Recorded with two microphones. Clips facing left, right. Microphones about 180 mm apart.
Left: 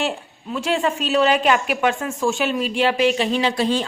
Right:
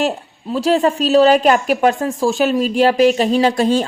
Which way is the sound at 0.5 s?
35° right (ahead or behind).